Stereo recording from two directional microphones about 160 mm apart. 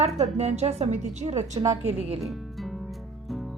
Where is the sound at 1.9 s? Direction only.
40° right (ahead or behind).